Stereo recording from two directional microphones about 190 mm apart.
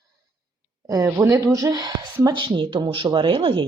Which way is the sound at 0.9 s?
15° right (ahead or behind).